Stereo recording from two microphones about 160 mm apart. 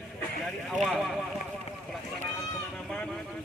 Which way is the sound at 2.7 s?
Centre (ahead or behind).